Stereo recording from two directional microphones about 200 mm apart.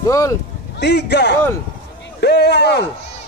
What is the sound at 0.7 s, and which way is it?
A man's voice, 55° left (ahead or behind).